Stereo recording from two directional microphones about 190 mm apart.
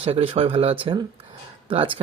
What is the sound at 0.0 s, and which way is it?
Speech, 30° right (ahead or behind).